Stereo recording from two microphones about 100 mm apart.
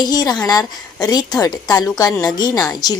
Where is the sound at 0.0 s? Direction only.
40° left (ahead or behind).